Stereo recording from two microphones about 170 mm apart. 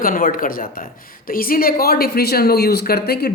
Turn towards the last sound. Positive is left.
turn(degrees=65)  # may be behind; listen again after turning